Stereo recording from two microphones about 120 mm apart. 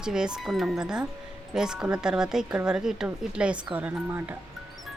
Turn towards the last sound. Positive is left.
turn(degrees=-15)  # may be behind; listen again after turning